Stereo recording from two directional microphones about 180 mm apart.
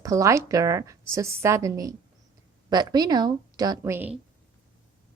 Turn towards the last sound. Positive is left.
turn(degrees=-10)  # may be behind; listen again after turning